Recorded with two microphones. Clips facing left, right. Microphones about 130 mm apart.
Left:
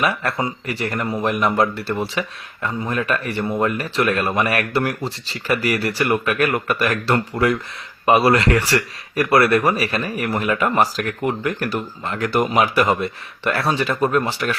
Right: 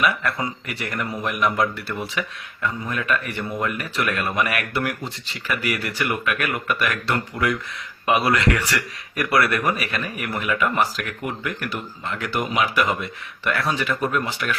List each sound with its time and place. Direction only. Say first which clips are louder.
0.0 s speech: left 2 dB; 30° left (ahead or behind)